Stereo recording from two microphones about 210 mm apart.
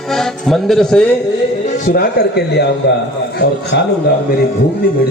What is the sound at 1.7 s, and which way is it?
A man's voice, 40° left (ahead or behind).